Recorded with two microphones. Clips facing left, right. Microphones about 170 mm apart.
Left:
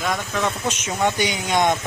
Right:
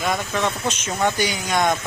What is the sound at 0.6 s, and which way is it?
Speech, 15° left (ahead or behind).